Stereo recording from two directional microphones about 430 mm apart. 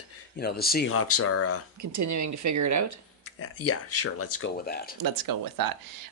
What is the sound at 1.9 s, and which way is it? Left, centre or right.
Speech, right.